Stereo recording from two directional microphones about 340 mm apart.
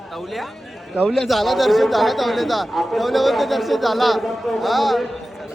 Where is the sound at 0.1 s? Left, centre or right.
Centre.